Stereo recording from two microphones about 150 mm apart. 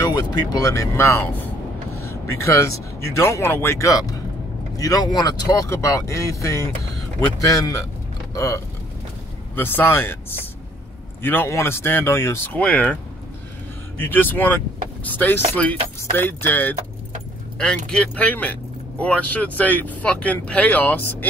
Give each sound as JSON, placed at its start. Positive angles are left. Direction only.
{"t": 0.0, "sound": "speech", "side_deg": 25}
{"t": 12.6, "sound": "speech", "side_deg": 10}
{"t": 13.9, "sound": "speech", "side_deg": 15}
{"t": 17.8, "sound": "speech", "side_deg": 5}